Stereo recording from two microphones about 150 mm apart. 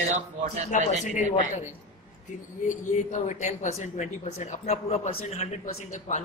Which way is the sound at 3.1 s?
50° left (ahead or behind).